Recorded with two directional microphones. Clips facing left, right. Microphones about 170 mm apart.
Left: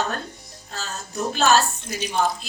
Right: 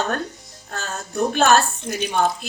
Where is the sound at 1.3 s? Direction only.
55° right (ahead or behind).